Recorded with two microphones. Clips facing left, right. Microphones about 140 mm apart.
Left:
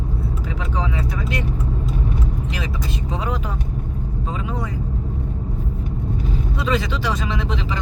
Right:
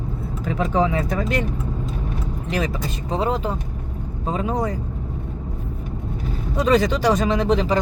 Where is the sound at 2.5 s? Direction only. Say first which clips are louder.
Right 3 dB; 40° right (ahead or behind).